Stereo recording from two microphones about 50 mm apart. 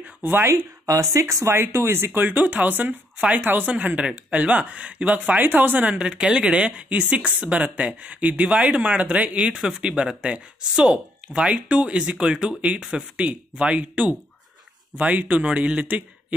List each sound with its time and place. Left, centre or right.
0.0 s speech: right
0.9 s speech: right
3.2 s speech: right
3.4 s speech: right
5.9 s speech: right
9.5 s speech: centre
13.1 s speech: right